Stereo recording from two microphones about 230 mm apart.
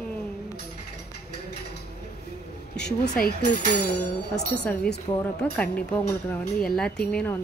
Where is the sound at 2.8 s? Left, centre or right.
Left.